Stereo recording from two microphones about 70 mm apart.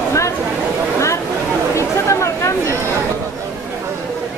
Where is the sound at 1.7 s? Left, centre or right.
Left.